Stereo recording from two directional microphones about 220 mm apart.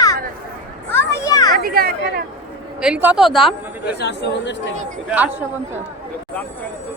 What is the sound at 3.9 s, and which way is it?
Speech, 50° left (ahead or behind).